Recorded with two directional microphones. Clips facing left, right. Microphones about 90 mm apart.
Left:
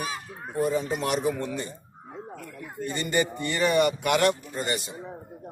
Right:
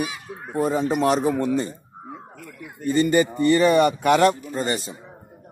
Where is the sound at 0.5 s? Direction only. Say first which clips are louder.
Right 4 dB; 35° right (ahead or behind).